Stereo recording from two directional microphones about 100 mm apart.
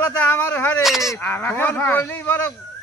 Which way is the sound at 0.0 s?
20° left (ahead or behind).